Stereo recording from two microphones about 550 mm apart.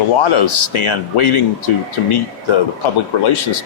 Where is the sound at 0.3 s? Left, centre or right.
Left.